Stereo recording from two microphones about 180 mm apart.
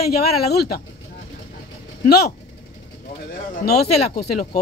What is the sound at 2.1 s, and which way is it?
Speech, 60° left (ahead or behind).